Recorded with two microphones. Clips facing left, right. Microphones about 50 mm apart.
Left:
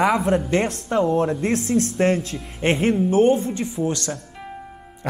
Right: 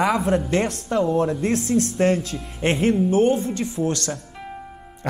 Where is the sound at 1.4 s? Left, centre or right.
Left.